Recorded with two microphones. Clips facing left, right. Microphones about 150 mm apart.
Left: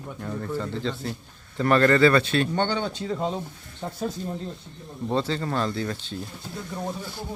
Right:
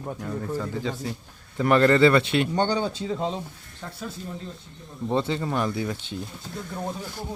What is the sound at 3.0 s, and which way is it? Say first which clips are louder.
Speech: even; 5° left (ahead or behind).